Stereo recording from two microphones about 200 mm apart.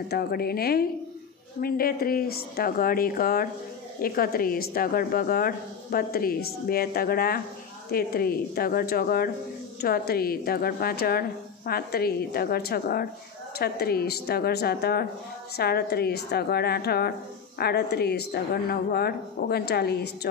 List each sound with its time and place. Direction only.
0.1 s speech: 50° left (ahead or behind)